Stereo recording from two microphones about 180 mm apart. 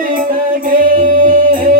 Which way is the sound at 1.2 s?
50° right (ahead or behind).